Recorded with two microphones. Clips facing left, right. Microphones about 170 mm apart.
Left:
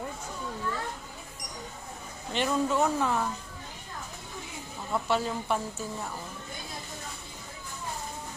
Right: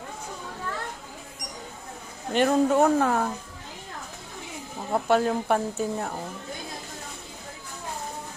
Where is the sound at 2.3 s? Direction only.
50° right (ahead or behind).